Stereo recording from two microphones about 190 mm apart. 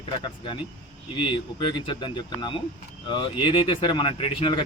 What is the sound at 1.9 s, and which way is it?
Speech, 25° left (ahead or behind).